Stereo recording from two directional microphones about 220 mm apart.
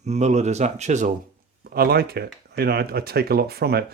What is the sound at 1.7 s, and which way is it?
Speech, 45° right (ahead or behind).